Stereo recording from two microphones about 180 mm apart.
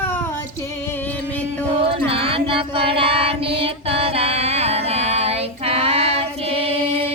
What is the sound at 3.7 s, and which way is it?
Female singing, 35° right (ahead or behind).